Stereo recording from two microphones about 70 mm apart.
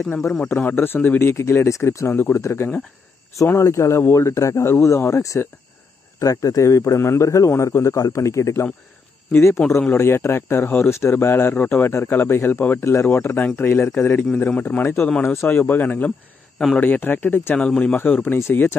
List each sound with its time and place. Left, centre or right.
0.5 s a man's voice: left
17.6 s speech: centre